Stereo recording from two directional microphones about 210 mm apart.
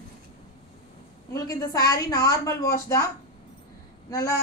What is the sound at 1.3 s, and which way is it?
A woman's voice, 15° left (ahead or behind).